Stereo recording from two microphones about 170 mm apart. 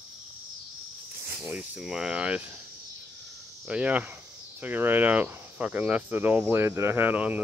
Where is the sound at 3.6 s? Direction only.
5° right (ahead or behind).